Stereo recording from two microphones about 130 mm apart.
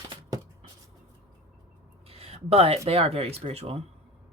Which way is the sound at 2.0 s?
50° right (ahead or behind).